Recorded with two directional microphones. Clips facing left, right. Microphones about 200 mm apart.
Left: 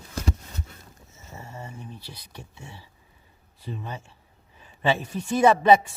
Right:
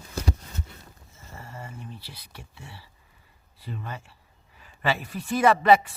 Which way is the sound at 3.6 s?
15° left (ahead or behind).